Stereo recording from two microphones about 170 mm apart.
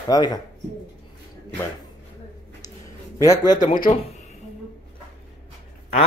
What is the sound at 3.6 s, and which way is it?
Speech, 55° left (ahead or behind).